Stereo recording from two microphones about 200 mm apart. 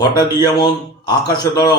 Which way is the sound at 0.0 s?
20° left (ahead or behind).